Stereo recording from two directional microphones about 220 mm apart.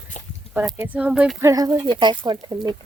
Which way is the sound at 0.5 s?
10° right (ahead or behind).